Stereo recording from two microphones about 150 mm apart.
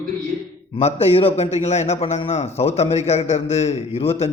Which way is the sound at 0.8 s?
40° left (ahead or behind).